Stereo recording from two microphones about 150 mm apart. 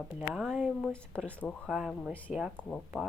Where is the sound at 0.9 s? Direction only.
10° left (ahead or behind).